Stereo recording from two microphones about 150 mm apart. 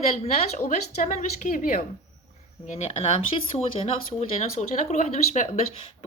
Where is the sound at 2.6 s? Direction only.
50° left (ahead or behind).